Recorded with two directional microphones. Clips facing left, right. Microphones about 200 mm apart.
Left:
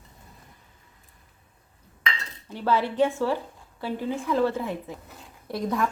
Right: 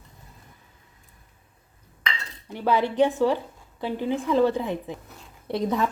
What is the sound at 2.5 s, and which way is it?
A woman's voice, 15° right (ahead or behind).